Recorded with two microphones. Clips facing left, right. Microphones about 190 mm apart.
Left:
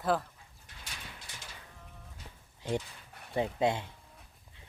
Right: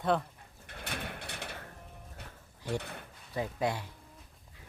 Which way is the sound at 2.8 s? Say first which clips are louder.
Right 1 dB; 60° right (ahead or behind).